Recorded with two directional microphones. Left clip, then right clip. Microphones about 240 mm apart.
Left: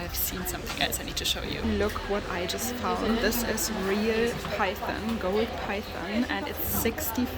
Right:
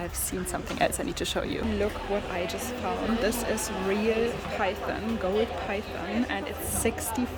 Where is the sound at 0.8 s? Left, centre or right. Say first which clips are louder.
Right 3 dB; right.